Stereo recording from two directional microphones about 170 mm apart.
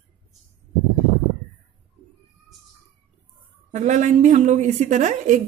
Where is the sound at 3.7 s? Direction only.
45° right (ahead or behind).